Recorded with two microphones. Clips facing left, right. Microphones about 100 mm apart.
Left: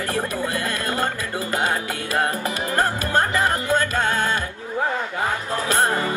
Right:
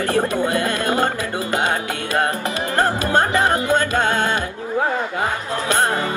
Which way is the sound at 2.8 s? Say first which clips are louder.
Right 4 dB; 20° right (ahead or behind).